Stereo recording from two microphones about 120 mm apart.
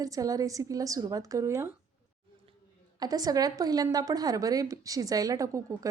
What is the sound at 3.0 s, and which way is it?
A woman's voice, 35° right (ahead or behind).